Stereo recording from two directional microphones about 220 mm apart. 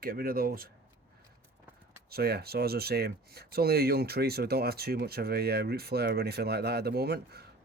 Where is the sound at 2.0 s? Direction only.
45° right (ahead or behind).